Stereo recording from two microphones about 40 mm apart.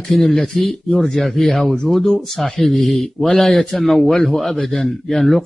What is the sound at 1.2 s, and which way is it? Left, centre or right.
Speech, centre.